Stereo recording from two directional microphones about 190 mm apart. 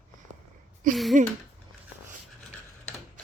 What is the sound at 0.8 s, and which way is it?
Speech, 45° right (ahead or behind).